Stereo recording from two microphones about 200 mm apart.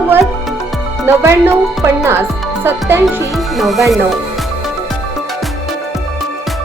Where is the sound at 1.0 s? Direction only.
15° right (ahead or behind).